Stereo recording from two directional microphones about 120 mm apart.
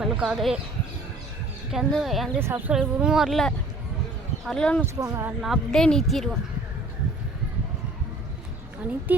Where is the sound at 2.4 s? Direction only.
20° right (ahead or behind).